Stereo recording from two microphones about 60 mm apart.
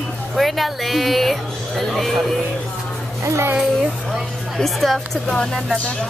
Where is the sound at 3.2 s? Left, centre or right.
Right.